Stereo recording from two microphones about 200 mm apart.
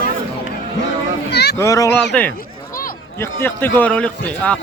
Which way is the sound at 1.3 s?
55° left (ahead or behind).